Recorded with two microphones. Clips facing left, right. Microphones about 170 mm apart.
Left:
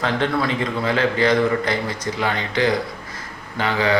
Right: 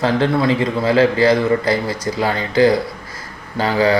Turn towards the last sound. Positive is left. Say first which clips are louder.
# right 5 dB
turn(degrees=-35)  # may be behind; listen again after turning